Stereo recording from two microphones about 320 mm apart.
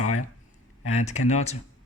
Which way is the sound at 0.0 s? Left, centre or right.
Left.